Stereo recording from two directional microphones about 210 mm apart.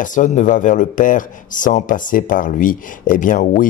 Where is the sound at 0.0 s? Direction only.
40° left (ahead or behind).